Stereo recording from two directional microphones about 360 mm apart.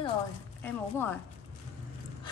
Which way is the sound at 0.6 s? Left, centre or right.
Centre.